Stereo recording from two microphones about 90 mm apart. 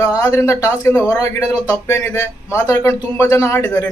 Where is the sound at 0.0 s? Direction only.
35° left (ahead or behind).